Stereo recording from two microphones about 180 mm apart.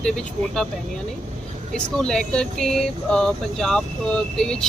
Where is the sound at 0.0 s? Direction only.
5° left (ahead or behind).